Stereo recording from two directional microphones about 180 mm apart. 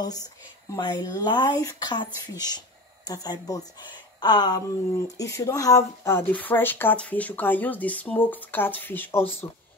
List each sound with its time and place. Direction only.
0.7 s speech: 20° left (ahead or behind)